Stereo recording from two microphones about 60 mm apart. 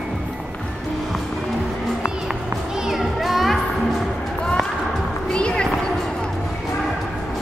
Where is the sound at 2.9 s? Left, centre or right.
Centre.